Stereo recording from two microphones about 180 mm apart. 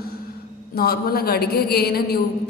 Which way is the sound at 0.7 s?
60° left (ahead or behind).